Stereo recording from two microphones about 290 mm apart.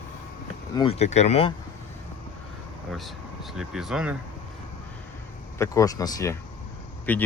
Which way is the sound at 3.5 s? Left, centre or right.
Centre.